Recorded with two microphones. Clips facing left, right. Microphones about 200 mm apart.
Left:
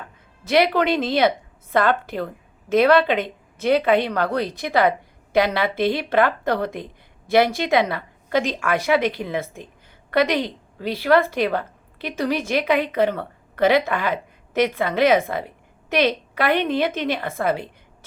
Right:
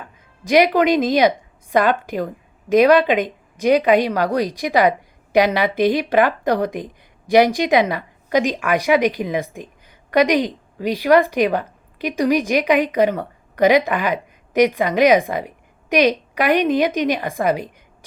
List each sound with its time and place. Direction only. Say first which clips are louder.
0.4 s a woman's voice: right 4 dB; 15° right (ahead or behind)